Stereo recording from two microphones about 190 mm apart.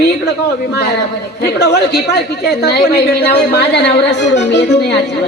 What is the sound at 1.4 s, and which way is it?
Speech, 60° left (ahead or behind).